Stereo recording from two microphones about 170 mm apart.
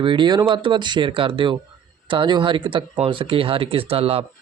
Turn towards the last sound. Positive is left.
turn(degrees=-35)  # may be behind; listen again after turning